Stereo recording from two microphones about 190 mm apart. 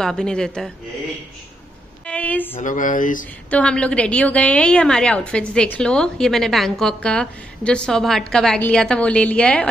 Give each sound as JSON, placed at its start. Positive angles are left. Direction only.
{"t": 0.0, "sound": "a woman's voice", "side_deg": 5}
{"t": 2.0, "sound": "a woman's voice", "side_deg": 5}
{"t": 2.6, "sound": "speech", "side_deg": 45}
{"t": 3.4, "sound": "a woman's voice", "side_deg": 5}